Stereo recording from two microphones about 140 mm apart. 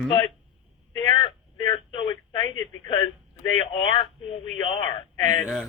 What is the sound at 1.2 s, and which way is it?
Telephone, 35° left (ahead or behind).